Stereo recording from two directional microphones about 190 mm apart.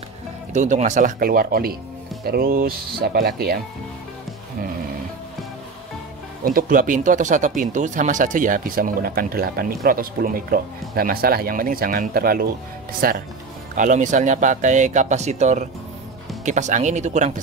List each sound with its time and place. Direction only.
0.5 s speech: 40° right (ahead or behind); by 3.5 s 55° right (ahead or behind)
6.4 s speech: 45° right (ahead or behind)